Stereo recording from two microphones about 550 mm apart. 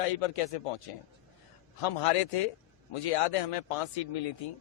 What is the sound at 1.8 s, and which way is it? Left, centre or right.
A man's voice, left.